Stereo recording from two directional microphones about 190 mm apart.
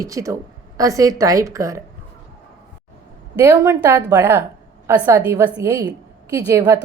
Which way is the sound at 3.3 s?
15° right (ahead or behind).